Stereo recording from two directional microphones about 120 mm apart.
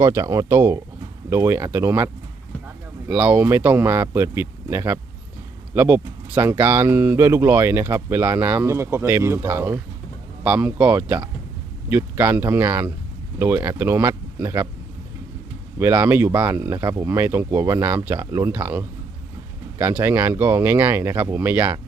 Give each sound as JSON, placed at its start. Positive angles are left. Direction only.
{"t": 0.0, "sound": "speech", "side_deg": -25}
{"t": 3.1, "sound": "speech", "side_deg": -15}
{"t": 15.8, "sound": "speech", "side_deg": -15}